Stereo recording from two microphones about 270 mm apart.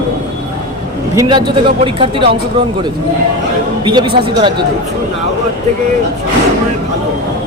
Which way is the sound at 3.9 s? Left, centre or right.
Centre.